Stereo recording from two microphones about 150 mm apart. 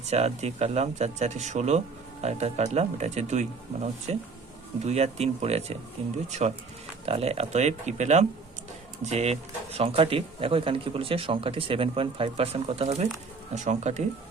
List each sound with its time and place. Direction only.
0.0 s speech: 45° right (ahead or behind)